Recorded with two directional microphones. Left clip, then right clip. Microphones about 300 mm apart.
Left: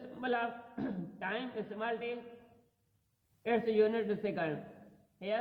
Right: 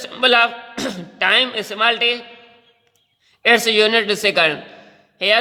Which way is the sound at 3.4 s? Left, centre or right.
Right.